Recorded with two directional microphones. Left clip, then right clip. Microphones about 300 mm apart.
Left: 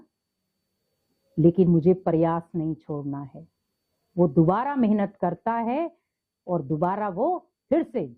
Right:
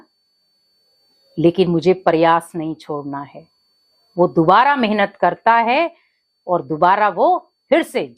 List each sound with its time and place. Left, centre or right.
1.4 s a woman's voice: centre
4.4 s a woman's voice: centre
6.4 s a woman's voice: centre
7.2 s speech: right
7.7 s a woman's voice: centre